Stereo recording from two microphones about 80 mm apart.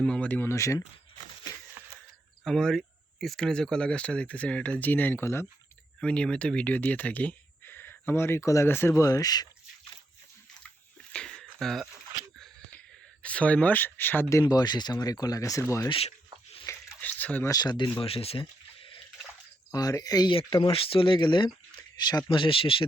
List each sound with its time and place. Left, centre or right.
0.0 s speech: centre
0.4 s speech: left
1.8 s a sound: right
2.4 s speech: centre; by 5.5 s left
6.0 s speech: centre; by 9.0 s left
9.0 s speech: left
11.1 s a sound: centre
13.2 s speech: centre
14.4 s speech: left
16.7 s a sound: left
17.0 s a sound: left
17.4 s speech: left
19.7 s speech: left
22.3 s speech: left